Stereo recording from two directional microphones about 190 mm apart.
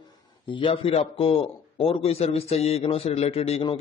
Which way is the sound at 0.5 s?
30° left (ahead or behind).